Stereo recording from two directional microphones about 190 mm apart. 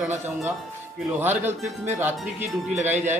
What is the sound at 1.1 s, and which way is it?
Speech, 10° right (ahead or behind).